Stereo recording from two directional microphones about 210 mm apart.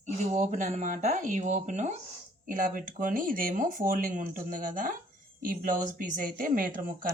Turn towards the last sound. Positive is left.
turn(degrees=-40)  # may be behind; listen again after turning